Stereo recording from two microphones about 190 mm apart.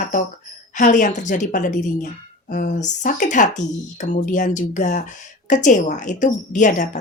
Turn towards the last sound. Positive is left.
turn(degrees=40)  # may be behind; listen again after turning